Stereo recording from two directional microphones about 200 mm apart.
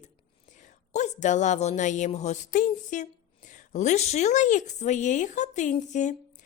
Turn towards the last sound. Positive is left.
turn(degrees=35)  # may be behind; listen again after turning